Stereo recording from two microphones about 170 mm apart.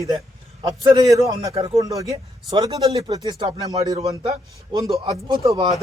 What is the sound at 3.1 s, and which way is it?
A man's voice, 20° right (ahead or behind).